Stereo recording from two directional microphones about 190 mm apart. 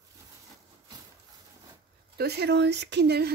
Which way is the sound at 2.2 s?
60° right (ahead or behind).